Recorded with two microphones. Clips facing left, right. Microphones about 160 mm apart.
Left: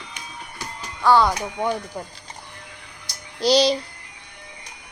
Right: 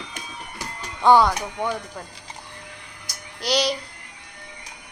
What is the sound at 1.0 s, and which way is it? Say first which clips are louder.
Speech: right 1 dB; 20° right (ahead or behind).